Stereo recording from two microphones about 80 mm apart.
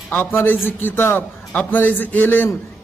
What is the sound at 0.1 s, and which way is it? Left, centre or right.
A man's voice, left.